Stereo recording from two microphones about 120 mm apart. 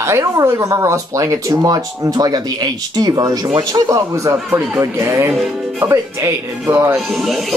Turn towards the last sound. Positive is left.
turn(degrees=0)  # may be behind; listen again after turning